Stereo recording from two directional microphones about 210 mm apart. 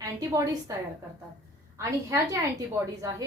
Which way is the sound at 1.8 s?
15° right (ahead or behind).